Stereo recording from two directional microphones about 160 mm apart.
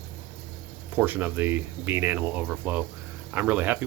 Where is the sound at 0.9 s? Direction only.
10° right (ahead or behind).